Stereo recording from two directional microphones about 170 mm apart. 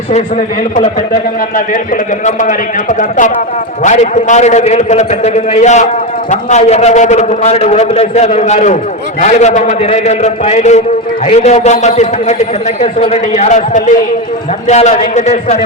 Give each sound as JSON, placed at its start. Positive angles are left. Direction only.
{"t": 0.1, "sound": "a man's voice", "side_deg": 40}
{"t": 2.2, "sound": "a man's voice", "side_deg": 50}